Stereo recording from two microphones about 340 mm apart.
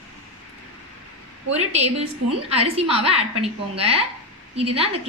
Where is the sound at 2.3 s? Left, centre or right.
Centre.